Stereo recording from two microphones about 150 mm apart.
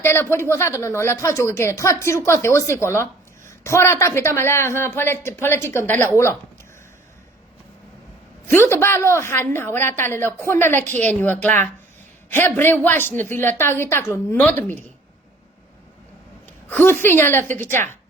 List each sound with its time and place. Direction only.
0.0 s a woman's voice: 15° left (ahead or behind)
8.4 s a woman's voice: 15° left (ahead or behind)
16.6 s a woman's voice: 15° left (ahead or behind)